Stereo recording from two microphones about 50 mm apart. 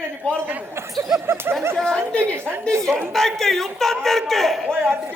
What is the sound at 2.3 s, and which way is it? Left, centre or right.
Speech, right.